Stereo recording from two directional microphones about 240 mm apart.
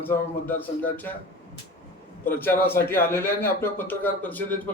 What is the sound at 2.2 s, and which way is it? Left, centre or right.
A man's voice, centre.